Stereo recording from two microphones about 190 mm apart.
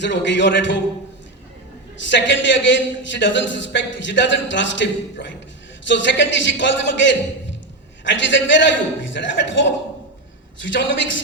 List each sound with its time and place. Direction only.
0.0 s a man's voice: 70° left (ahead or behind)
2.0 s a man's voice: 70° left (ahead or behind)